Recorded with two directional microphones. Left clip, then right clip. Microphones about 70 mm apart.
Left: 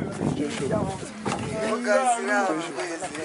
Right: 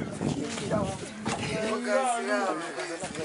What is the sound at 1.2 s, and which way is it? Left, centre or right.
Speech, centre.